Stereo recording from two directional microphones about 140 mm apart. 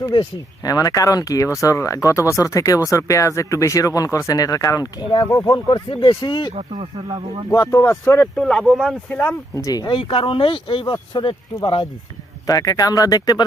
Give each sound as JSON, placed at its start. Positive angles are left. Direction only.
{"t": 0.1, "sound": "speech", "side_deg": 30}
{"t": 6.5, "sound": "speech", "side_deg": -50}
{"t": 7.5, "sound": "speech", "side_deg": 25}
{"t": 8.4, "sound": "speech", "side_deg": 5}
{"t": 9.0, "sound": "speech", "side_deg": 15}
{"t": 9.9, "sound": "speech", "side_deg": 40}
{"t": 12.5, "sound": "speech", "side_deg": 25}